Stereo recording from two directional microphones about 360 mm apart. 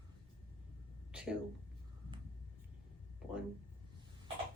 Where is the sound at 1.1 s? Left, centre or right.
Centre.